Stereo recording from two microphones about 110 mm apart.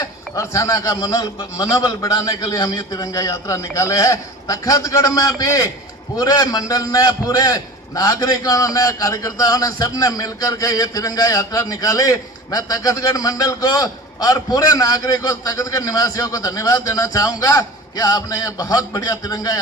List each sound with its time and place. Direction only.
0.0 s a man's voice: 30° left (ahead or behind)